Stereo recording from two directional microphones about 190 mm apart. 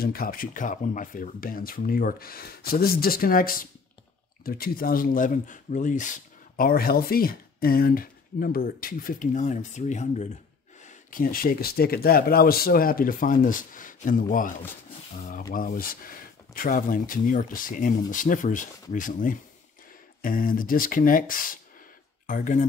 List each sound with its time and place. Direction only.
0.0 s speech: 50° left (ahead or behind)
15.5 s speech: 50° left (ahead or behind)